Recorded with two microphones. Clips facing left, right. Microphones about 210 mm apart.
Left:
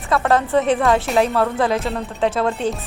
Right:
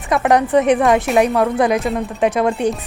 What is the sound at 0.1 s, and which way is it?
Speech, 15° right (ahead or behind).